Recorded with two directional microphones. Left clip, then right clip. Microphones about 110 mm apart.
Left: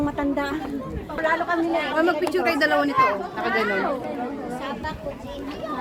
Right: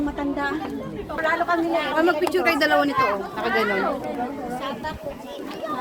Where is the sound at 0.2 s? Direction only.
30° left (ahead or behind).